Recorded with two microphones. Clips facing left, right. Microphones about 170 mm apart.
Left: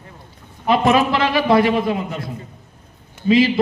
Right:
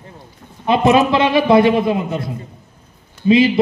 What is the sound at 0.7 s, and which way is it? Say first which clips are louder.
A man's voice: right 3 dB; 25° right (ahead or behind).